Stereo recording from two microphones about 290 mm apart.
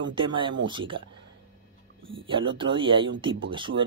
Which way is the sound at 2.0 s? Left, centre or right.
Centre.